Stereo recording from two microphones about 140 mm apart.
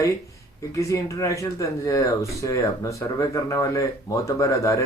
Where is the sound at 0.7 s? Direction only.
20° left (ahead or behind).